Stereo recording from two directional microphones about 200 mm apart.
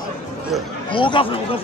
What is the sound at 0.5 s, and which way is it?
Speech, centre (ahead or behind).